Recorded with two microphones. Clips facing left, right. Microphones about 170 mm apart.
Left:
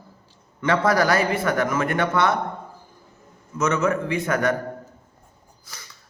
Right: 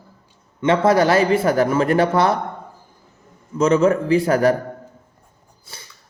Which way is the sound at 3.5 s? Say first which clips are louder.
Right 6 dB; 30° right (ahead or behind).